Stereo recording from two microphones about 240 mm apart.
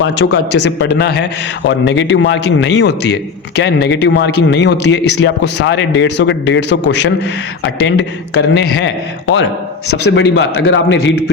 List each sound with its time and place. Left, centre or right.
0.0 s a man's voice: left
10.2 s a man's voice: left